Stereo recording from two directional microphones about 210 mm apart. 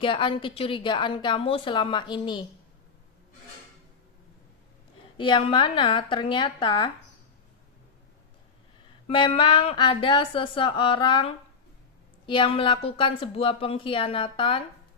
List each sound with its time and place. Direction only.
0.0 s a woman's voice: 25° left (ahead or behind)
5.1 s a woman's voice: 25° left (ahead or behind)
9.0 s a woman's voice: 25° left (ahead or behind)